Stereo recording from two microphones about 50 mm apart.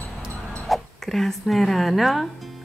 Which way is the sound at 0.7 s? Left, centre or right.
Centre.